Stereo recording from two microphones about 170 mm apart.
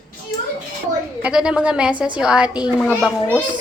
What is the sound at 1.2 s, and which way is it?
A child's voice, 5° right (ahead or behind).